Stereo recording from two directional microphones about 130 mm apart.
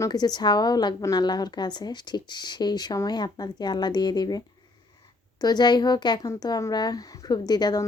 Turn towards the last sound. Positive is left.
turn(degrees=30)  # may be behind; listen again after turning